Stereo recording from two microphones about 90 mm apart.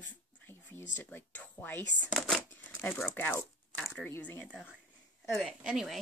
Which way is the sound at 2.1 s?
5° left (ahead or behind).